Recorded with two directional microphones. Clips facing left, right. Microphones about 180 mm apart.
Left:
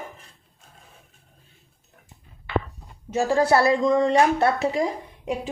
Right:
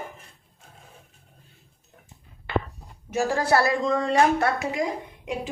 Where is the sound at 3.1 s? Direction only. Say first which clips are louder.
Left 3 dB; 20° left (ahead or behind).